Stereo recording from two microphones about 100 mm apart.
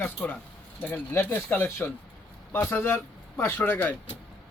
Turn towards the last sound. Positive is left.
turn(degrees=20)  # may be behind; listen again after turning